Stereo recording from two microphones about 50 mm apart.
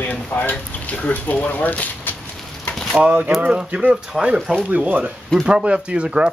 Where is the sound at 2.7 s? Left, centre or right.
Centre.